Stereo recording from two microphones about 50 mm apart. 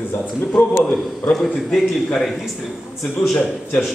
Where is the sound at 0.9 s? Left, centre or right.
Centre.